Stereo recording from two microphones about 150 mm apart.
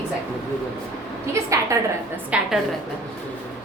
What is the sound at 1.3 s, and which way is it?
Speech, 20° right (ahead or behind).